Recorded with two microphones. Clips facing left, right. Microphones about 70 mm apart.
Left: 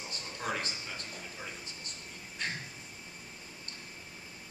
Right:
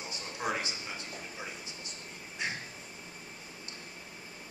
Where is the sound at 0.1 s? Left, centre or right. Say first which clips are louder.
Right 2 dB; centre.